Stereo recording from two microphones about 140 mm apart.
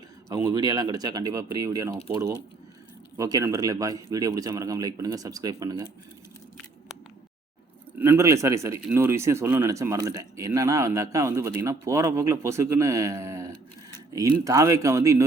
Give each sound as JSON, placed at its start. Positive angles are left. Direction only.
{"t": 0.3, "sound": "speech", "side_deg": -25}
{"t": 7.9, "sound": "speech", "side_deg": -15}